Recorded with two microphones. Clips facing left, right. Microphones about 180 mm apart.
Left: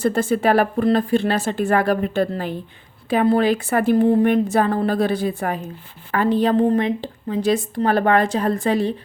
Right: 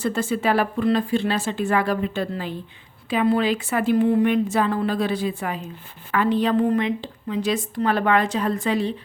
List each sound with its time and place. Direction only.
0.0 s a woman's voice: 40° left (ahead or behind)
0.4 s a woman's voice: 50° left (ahead or behind)
0.9 s a woman's voice: 40° left (ahead or behind)
7.3 s a woman's voice: 30° left (ahead or behind)